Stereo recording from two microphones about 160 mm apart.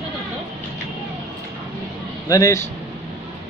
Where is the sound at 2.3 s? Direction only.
20° left (ahead or behind).